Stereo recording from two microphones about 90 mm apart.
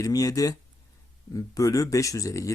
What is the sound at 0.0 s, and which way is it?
Speech, 45° left (ahead or behind).